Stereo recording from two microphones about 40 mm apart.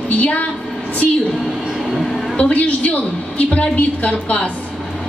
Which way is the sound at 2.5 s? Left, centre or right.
Left.